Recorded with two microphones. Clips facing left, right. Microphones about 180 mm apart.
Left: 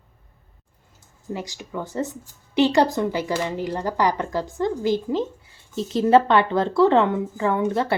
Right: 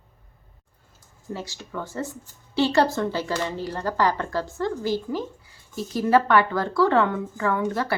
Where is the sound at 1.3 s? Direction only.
15° left (ahead or behind).